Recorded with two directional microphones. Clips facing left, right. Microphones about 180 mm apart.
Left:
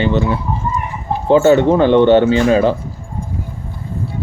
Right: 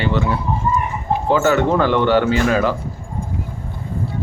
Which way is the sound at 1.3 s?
25° left (ahead or behind).